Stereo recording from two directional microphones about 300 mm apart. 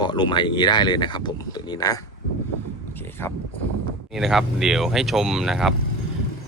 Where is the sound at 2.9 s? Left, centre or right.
Centre.